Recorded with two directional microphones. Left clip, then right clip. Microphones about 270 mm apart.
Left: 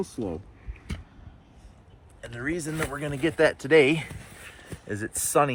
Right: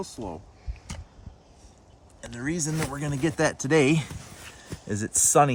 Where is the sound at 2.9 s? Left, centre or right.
Right.